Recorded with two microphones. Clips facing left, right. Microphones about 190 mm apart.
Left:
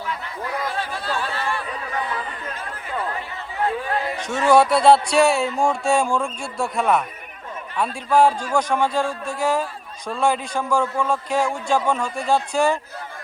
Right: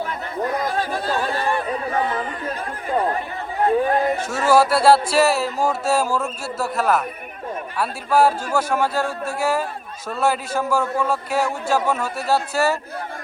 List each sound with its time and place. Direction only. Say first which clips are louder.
0.0 s chatter: right 5 dB; 45° right (ahead or behind)
3.6 s speech: right 6 dB; 40° right (ahead or behind)
4.3 s a man's voice: left 2 dB; 5° right (ahead or behind)